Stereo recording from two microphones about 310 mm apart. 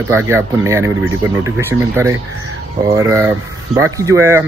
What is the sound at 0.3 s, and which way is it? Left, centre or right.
Speech, centre.